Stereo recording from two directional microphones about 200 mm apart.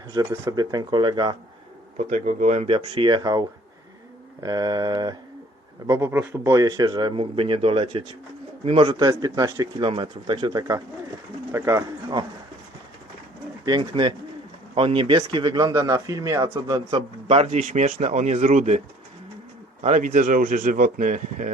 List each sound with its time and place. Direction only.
0.1 s speech: 15° right (ahead or behind)
2.0 s speech: 40° right (ahead or behind); by 3.4 s 20° right (ahead or behind)
4.4 s speech: 20° right (ahead or behind)
13.7 s speech: 25° right (ahead or behind)
19.8 s speech: 40° right (ahead or behind)